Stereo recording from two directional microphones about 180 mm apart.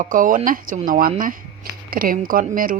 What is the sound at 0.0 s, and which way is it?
Speech, 50° right (ahead or behind).